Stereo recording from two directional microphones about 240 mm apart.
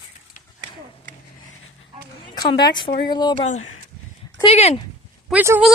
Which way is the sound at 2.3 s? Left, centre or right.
Centre.